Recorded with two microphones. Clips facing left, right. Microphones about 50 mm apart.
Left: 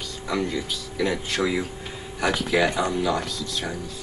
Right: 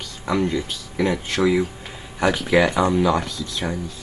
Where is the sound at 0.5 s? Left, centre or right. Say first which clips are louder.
Right 3 dB; right.